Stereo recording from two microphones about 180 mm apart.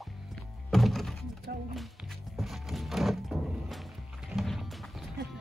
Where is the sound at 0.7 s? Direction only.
Centre (ahead or behind).